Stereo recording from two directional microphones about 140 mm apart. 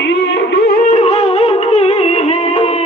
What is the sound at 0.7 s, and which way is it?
Music, 65° left (ahead or behind).